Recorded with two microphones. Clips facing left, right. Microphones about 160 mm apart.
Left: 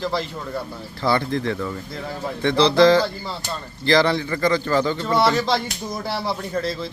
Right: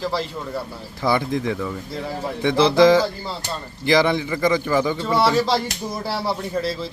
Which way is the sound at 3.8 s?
15° right (ahead or behind).